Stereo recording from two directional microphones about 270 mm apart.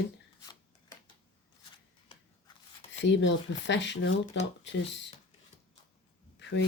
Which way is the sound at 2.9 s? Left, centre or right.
Left.